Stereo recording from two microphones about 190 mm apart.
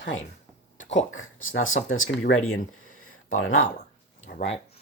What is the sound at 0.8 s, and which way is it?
Speech, 85° left.